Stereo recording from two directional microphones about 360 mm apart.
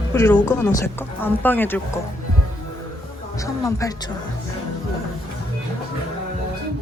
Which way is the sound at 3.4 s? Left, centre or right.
Centre.